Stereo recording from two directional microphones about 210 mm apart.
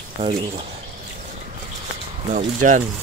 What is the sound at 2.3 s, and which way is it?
Speech, 35° right (ahead or behind).